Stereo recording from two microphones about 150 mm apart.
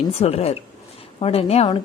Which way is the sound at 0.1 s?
40° left (ahead or behind).